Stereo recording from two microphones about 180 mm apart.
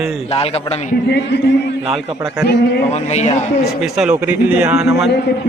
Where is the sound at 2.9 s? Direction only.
40° left (ahead or behind).